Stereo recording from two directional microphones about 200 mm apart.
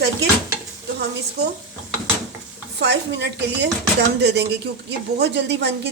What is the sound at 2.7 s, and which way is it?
Speech, 60° right (ahead or behind).